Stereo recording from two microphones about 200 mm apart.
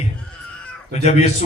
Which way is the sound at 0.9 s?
35° left (ahead or behind).